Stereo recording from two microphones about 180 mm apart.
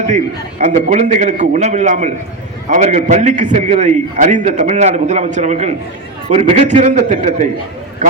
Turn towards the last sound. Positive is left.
turn(degrees=-40)  # may be behind; listen again after turning